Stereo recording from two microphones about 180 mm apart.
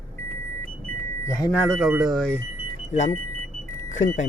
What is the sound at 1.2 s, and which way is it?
Speech, 15° left (ahead or behind).